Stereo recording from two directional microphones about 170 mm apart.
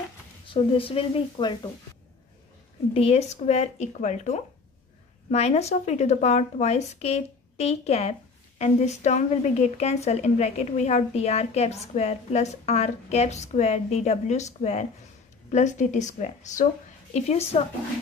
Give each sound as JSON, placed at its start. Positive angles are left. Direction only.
{"t": 0.5, "sound": "a woman's voice", "side_deg": 30}
{"t": 2.9, "sound": "a woman's voice", "side_deg": 35}